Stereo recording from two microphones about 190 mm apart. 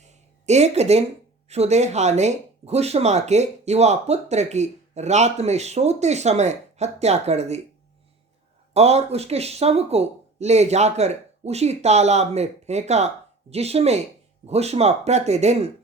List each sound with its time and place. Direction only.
0.0 s a sound: 35° right (ahead or behind)
1.5 s speech: 35° right (ahead or behind)
8.7 s speech: 35° right (ahead or behind)